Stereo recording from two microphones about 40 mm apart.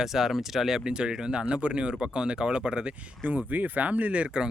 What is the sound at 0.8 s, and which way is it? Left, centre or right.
Speech, right.